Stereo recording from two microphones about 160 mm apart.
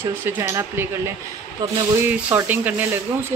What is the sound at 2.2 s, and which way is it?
Speech, 10° right (ahead or behind).